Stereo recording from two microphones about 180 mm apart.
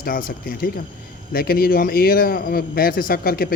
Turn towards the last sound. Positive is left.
turn(degrees=55)  # may be behind; listen again after turning